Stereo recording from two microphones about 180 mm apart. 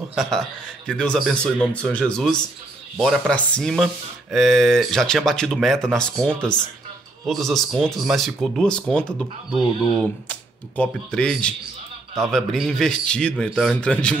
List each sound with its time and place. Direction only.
0.1 s speech: centre (ahead or behind)